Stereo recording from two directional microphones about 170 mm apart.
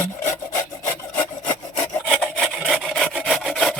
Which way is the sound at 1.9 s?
10° left (ahead or behind).